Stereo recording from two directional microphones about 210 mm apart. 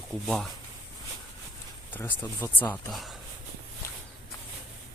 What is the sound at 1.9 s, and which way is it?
Speech, 10° left (ahead or behind).